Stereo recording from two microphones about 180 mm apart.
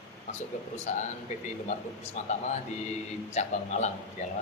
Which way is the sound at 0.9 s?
40° left (ahead or behind).